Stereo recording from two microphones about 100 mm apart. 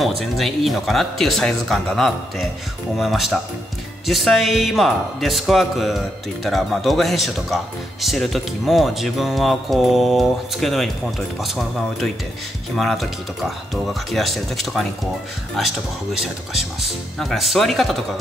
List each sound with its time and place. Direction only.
0.2 s speech: centre (ahead or behind)